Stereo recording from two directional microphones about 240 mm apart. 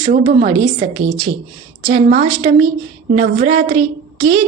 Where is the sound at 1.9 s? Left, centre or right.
Right.